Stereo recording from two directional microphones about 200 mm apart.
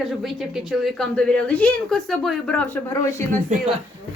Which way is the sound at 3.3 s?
40° right (ahead or behind).